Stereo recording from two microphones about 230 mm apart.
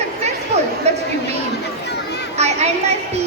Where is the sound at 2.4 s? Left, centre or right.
Right.